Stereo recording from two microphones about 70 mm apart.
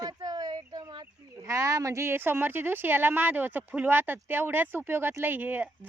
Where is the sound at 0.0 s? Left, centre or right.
Right.